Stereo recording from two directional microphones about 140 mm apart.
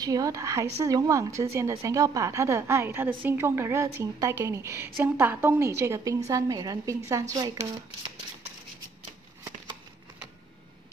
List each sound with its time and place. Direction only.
0.0 s a woman's voice: 25° right (ahead or behind)